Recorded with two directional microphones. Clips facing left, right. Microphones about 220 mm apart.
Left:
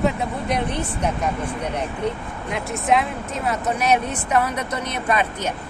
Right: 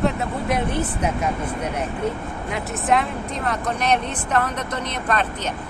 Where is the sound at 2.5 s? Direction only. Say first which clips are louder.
Left 1 dB; centre (ahead or behind).